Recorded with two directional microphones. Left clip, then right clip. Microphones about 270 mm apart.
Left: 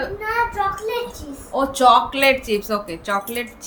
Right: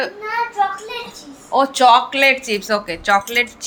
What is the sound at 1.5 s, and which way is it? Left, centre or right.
Speech, centre.